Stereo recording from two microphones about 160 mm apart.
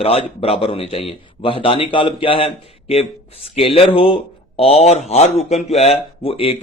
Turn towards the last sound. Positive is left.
turn(degrees=35)  # may be behind; listen again after turning